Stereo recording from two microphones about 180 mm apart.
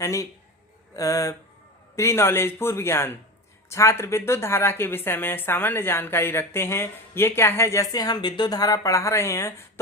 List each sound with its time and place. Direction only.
0.0 s a man's voice: 15° left (ahead or behind)